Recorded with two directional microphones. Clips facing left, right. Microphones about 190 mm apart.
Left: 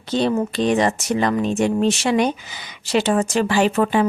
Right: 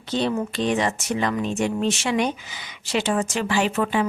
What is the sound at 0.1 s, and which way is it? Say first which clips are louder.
Speech: left 4 dB; 40° left (ahead or behind).